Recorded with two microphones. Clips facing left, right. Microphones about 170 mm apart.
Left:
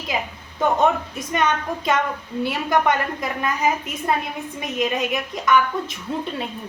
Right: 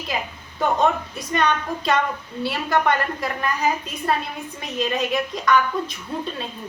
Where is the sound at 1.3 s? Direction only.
20° left (ahead or behind).